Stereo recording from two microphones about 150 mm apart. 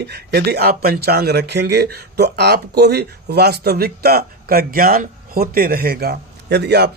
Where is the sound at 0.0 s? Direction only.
90° right.